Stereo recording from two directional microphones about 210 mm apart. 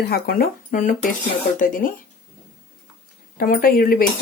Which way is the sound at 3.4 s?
45° left (ahead or behind).